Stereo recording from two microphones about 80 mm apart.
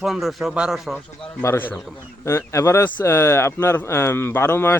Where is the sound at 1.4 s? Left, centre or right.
Left.